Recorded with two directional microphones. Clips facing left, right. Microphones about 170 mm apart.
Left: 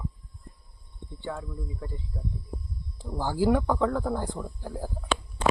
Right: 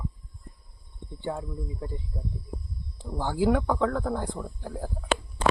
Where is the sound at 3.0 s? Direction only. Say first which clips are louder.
Even; 5° left (ahead or behind).